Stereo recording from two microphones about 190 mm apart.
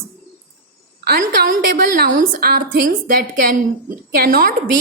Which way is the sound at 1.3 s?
55° right (ahead or behind).